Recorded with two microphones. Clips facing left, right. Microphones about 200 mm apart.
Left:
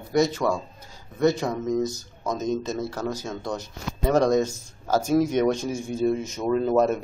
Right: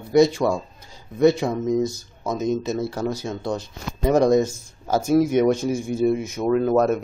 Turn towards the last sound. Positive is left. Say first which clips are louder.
# right 2 dB
turn(degrees=-5)  # may be behind; listen again after turning